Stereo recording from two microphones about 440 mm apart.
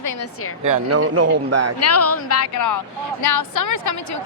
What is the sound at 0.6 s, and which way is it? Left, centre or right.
Speech, right.